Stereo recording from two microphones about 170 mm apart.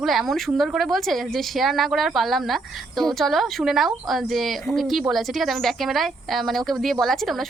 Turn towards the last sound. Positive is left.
turn(degrees=0)  # may be behind; listen again after turning